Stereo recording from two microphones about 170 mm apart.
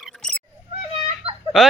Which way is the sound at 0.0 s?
5° left (ahead or behind).